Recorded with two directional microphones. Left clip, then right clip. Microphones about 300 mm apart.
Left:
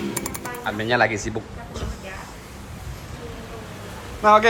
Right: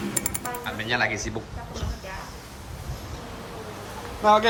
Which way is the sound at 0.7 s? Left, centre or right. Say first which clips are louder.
Left 6 dB; centre.